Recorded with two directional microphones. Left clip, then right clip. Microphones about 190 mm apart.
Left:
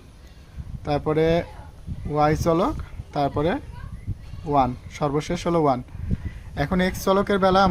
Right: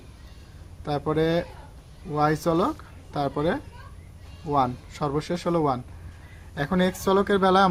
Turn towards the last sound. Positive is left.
turn(degrees=15)  # may be behind; listen again after turning